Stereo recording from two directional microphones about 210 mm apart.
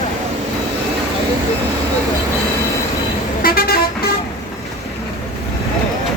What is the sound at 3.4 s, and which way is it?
Vehicle, 45° left (ahead or behind).